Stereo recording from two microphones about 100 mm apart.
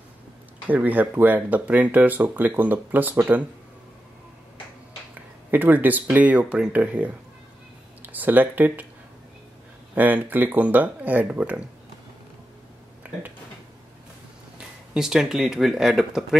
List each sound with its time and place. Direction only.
0.7 s speech: 15° right (ahead or behind)
5.5 s speech: 20° right (ahead or behind)
9.9 s speech: 15° right (ahead or behind)
15.0 s speech: 5° right (ahead or behind)